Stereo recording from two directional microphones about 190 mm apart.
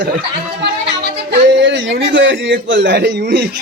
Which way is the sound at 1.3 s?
70° right (ahead or behind).